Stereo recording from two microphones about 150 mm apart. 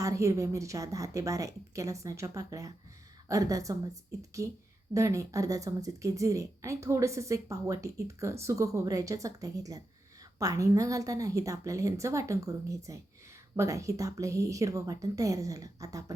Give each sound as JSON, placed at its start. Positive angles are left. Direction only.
{"t": 0.0, "sound": "a woman's voice", "side_deg": -20}